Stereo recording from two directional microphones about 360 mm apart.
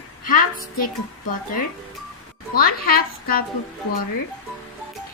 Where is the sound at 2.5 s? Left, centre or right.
Left.